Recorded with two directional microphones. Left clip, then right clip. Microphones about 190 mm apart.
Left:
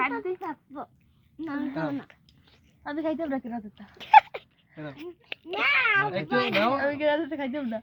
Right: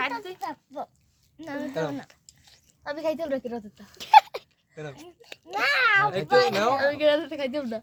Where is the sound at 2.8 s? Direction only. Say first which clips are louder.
Right 1 dB; 45° right (ahead or behind).